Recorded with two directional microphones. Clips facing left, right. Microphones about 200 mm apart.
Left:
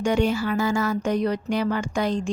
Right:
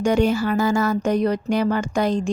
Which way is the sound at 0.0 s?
40° right (ahead or behind).